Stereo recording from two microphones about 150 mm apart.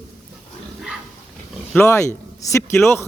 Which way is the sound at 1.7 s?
15° left (ahead or behind).